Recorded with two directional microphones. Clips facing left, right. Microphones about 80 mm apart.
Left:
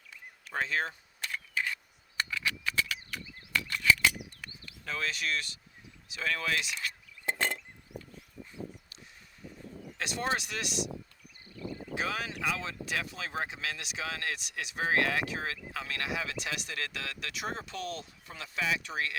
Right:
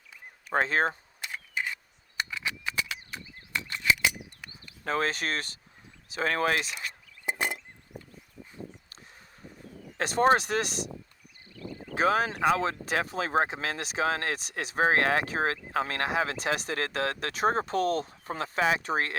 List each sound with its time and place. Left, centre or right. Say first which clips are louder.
0.5 s speech: right 7 dB; right
1.2 s single-lens reflex camera: even; centre
4.8 s speech: right 7 dB; right
6.8 s a sound: right 1 dB; centre
10.0 s speech: right 10 dB; right
11.9 s speech: right 10 dB; right